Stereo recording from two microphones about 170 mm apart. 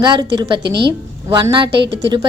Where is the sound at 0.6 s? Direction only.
75° right (ahead or behind).